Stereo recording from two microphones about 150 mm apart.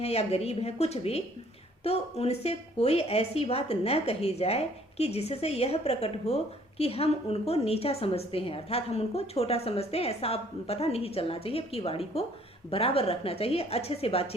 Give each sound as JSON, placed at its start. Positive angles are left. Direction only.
{"t": 0.0, "sound": "a woman's voice", "side_deg": 45}